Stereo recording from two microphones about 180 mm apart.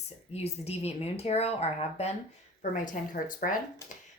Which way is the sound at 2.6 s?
45° left (ahead or behind).